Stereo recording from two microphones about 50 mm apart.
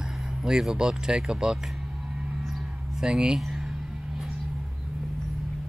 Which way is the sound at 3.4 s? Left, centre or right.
Centre.